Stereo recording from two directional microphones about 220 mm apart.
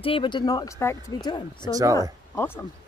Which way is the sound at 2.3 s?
10° left (ahead or behind).